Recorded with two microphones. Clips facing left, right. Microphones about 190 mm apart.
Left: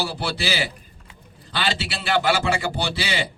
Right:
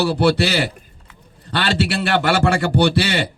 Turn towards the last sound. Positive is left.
turn(degrees=-65)  # may be behind; listen again after turning